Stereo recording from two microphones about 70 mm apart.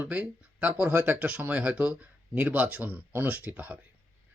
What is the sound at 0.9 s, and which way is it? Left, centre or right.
Speech, right.